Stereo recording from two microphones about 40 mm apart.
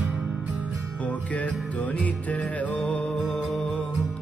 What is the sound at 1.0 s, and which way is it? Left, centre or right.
Music, left.